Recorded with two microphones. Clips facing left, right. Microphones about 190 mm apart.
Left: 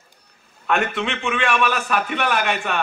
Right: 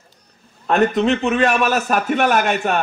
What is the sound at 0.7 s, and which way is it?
A man's voice, 35° right (ahead or behind).